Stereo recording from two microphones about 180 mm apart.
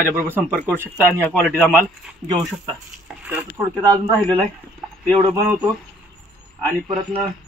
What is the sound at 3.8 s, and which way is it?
Speech, 25° right (ahead or behind).